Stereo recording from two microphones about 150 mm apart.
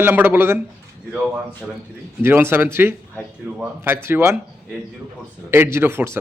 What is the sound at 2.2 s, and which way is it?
A man's voice, 15° right (ahead or behind).